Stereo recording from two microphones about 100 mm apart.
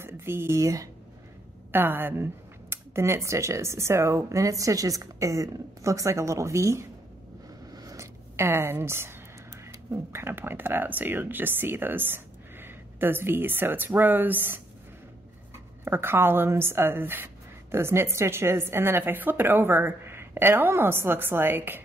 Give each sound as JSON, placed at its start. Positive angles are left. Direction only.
{"t": 0.0, "sound": "speech", "side_deg": -25}
{"t": 1.7, "sound": "speech", "side_deg": -20}
{"t": 7.7, "sound": "a sound", "side_deg": -35}
{"t": 9.8, "sound": "speech", "side_deg": -25}
{"t": 15.8, "sound": "speech", "side_deg": -25}